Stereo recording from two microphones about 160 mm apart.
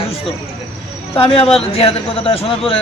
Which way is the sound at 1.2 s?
35° left (ahead or behind).